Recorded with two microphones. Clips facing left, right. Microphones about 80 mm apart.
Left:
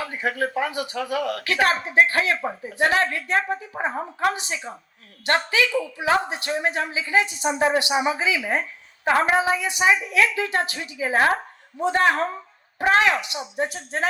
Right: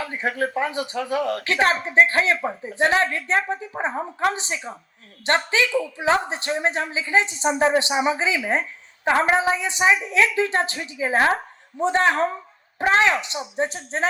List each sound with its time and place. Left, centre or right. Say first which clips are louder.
0.1 s a woman's voice: right 1 dB; right